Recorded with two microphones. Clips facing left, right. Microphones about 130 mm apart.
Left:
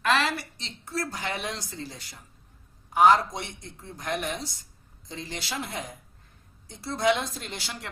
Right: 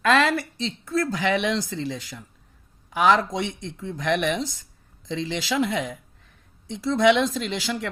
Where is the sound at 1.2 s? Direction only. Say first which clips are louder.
Right 10 dB; 90° right.